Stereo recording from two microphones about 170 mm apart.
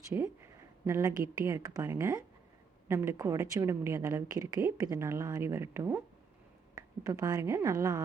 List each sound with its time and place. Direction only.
0.9 s a woman's voice: 15° right (ahead or behind)